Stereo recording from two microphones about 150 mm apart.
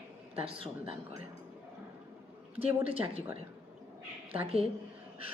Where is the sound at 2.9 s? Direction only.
40° right (ahead or behind).